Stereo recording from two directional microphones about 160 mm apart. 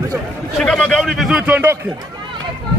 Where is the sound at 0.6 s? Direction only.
5° left (ahead or behind).